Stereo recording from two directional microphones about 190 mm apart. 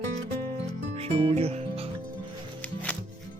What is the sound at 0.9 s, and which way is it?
Music, 35° right (ahead or behind).